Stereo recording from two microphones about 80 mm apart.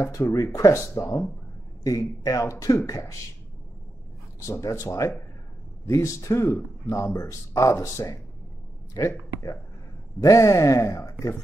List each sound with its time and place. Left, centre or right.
0.0 s a man's voice: left
4.4 s speech: left